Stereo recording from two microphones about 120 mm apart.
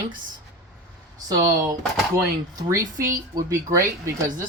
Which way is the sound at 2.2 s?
25° right (ahead or behind).